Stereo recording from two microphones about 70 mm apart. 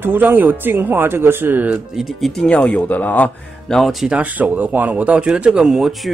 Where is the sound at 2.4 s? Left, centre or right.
Centre.